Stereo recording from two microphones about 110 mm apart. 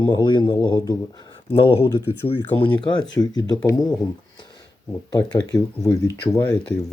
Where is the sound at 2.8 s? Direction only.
45° left (ahead or behind).